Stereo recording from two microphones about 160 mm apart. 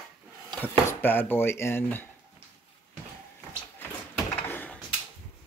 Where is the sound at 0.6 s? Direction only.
10° left (ahead or behind).